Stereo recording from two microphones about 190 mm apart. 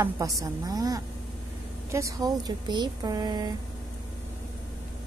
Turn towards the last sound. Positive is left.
turn(degrees=-20)  # may be behind; listen again after turning